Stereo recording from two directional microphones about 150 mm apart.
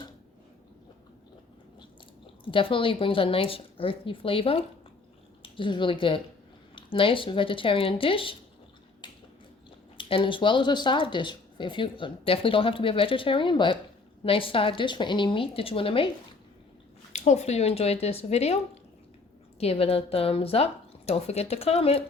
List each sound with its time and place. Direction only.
2.4 s a woman's voice: 35° left (ahead or behind)
10.0 s speech: 35° left (ahead or behind)
17.1 s speech: 45° left (ahead or behind)